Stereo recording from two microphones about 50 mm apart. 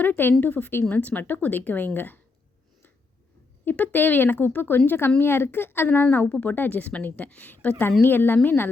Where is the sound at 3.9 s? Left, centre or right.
Left.